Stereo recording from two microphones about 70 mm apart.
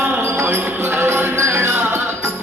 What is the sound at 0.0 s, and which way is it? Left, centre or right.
Music, right.